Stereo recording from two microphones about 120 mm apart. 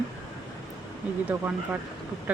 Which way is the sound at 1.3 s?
15° right (ahead or behind).